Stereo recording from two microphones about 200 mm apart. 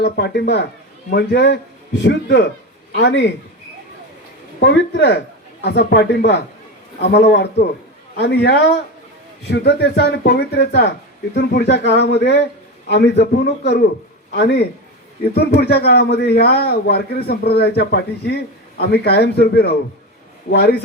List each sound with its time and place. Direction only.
0.0 s a man's voice: 55° left (ahead or behind)
4.6 s a man's voice: 60° left (ahead or behind)